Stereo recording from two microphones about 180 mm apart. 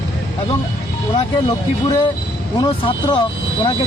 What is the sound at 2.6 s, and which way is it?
Speech, 30° left (ahead or behind).